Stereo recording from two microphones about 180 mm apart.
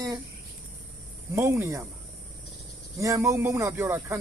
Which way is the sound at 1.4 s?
15° right (ahead or behind).